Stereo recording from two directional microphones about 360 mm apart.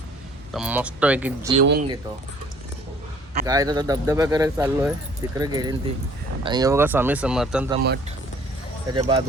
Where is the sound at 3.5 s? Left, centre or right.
Centre.